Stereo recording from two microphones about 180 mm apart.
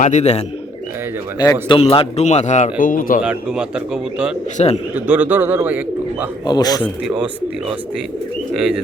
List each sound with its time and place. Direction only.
0.0 s speech: 40° left (ahead or behind)
1.6 s speech: 25° left (ahead or behind); by 3.2 s 50° left (ahead or behind)
3.2 s speech: 5° right (ahead or behind)
4.5 s speech: 40° left (ahead or behind)
4.9 s speech: 10° right (ahead or behind)
6.4 s a man's voice: 20° left (ahead or behind)
8.5 s speech: 5° right (ahead or behind)